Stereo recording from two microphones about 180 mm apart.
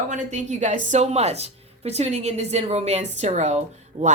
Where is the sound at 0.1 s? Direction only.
40° right (ahead or behind).